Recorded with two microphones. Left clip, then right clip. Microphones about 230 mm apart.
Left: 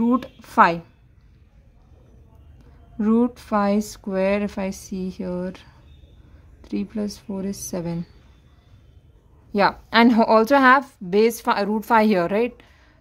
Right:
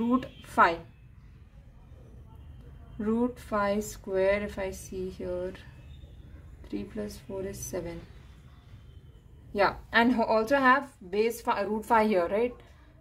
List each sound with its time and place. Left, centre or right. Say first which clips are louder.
0.0 s speech: left 7 dB; left
3.0 s a woman's voice: left 8 dB; left
9.5 s a woman's voice: left 6 dB; left